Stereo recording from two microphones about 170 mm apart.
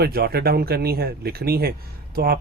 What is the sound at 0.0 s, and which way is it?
Speech, 65° right (ahead or behind).